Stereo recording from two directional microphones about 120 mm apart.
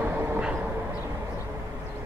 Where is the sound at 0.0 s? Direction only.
15° right (ahead or behind).